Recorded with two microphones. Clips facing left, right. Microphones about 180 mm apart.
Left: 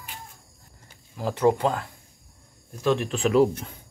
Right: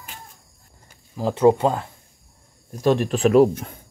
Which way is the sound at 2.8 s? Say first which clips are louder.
Right 5 dB; 45° right (ahead or behind).